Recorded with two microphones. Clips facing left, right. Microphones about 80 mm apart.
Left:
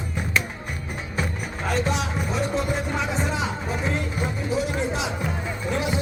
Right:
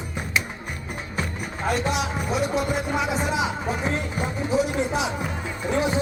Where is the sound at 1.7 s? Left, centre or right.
Centre.